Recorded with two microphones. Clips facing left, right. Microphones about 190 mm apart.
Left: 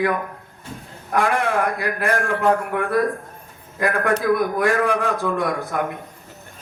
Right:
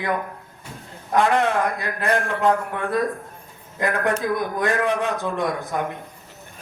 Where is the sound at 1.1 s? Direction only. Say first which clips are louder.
Right 1 dB; 20° right (ahead or behind).